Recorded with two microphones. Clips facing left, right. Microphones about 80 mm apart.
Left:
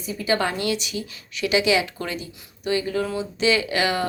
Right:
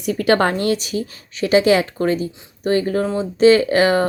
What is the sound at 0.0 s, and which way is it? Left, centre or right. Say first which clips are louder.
A woman's voice: right 7 dB; right.